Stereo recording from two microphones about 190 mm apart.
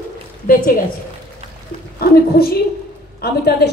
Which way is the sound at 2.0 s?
55° left (ahead or behind).